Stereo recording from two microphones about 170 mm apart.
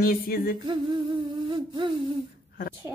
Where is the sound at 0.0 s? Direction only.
55° left (ahead or behind).